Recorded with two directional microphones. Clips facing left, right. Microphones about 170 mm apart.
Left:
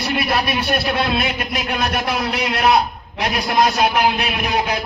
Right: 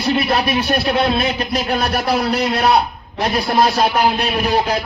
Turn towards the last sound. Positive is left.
turn(degrees=-35)  # may be behind; listen again after turning